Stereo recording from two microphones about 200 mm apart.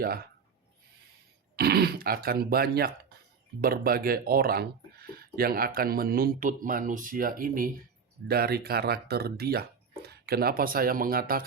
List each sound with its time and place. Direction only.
0.0 s speech: 50° right (ahead or behind)
1.5 s speech: 50° right (ahead or behind)